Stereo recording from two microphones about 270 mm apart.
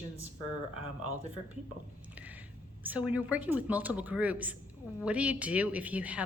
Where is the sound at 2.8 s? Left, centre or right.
Centre.